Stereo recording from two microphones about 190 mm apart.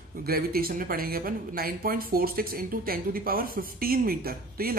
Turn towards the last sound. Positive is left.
turn(degrees=-50)  # may be behind; listen again after turning